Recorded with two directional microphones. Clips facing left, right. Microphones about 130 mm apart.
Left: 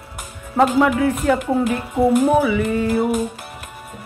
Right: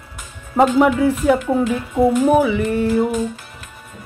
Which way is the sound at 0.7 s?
15° right (ahead or behind).